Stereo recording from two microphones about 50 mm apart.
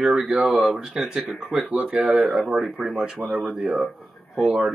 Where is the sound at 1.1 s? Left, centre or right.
Right.